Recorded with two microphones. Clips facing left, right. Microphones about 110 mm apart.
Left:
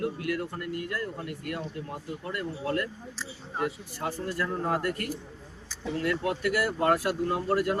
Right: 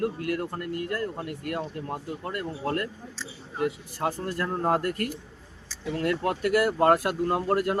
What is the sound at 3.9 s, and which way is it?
Speech, 45° right (ahead or behind).